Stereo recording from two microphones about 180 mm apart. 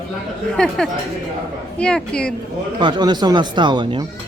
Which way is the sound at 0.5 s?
5° left (ahead or behind).